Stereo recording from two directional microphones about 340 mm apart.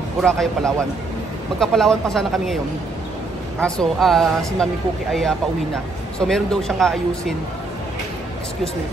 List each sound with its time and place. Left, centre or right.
0.2 s speech: centre
6.1 s speech: centre